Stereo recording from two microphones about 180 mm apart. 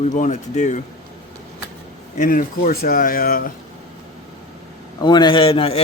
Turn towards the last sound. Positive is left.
turn(degrees=30)  # may be behind; listen again after turning